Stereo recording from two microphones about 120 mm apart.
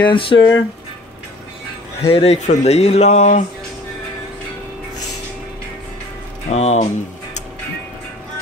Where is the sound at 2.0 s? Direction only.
55° left (ahead or behind); by 3.4 s 80° left.